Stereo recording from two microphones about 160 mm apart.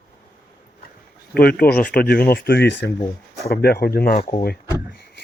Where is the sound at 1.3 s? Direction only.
70° left (ahead or behind); by 2.9 s 90° left.